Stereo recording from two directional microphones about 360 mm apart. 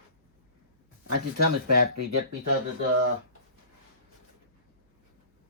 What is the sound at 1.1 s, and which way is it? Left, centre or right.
Speech, right.